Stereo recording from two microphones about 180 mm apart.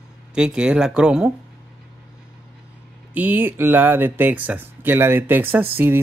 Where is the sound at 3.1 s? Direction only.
10° right (ahead or behind).